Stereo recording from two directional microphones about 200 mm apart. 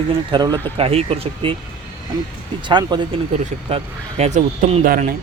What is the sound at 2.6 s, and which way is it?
Speech, 20° right (ahead or behind).